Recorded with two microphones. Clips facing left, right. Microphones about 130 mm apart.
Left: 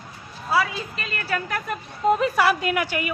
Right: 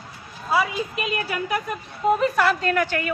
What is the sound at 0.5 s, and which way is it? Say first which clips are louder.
A woman's voice: right 1 dB; 15° right (ahead or behind).